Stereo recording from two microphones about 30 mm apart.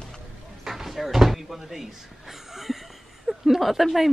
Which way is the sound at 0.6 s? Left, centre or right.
Centre.